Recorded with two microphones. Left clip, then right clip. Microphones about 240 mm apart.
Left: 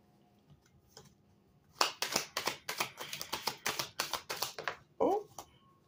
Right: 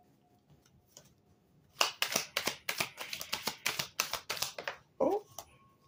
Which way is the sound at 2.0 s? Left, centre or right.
Centre.